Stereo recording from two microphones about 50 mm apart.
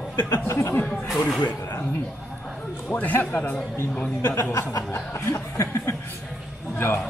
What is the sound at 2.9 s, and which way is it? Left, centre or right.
Speech, left.